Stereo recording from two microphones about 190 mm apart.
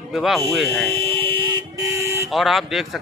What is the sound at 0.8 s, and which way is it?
Vehicle, 30° right (ahead or behind).